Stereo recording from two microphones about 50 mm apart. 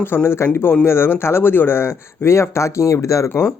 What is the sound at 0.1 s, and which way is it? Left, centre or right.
Speech, left.